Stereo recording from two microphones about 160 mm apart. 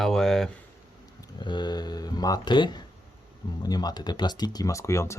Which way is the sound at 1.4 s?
30° left (ahead or behind).